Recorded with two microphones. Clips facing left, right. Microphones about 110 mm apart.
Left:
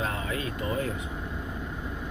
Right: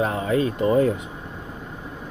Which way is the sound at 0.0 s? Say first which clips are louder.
Right 10 dB; 25° right (ahead or behind).